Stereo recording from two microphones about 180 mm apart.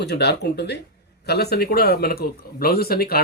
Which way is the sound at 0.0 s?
65° left (ahead or behind).